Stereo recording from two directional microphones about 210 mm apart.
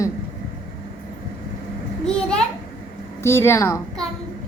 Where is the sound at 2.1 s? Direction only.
5° left (ahead or behind).